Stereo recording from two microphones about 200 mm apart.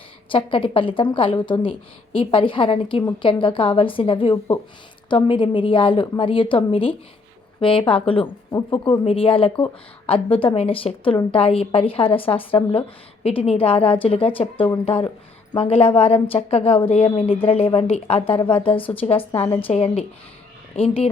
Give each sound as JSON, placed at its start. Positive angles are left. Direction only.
{"t": 0.3, "sound": "a woman's voice", "side_deg": 25}